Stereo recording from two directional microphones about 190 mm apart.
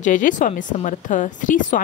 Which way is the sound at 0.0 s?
40° left (ahead or behind).